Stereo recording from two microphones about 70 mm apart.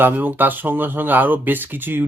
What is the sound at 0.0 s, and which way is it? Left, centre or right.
Speech, right.